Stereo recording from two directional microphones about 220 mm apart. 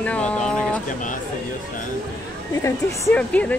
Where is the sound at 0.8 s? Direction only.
35° left (ahead or behind).